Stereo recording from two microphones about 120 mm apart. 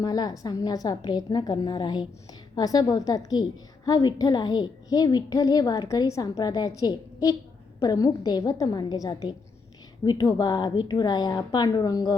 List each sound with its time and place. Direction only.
0.0 s a woman's voice: 35° left (ahead or behind)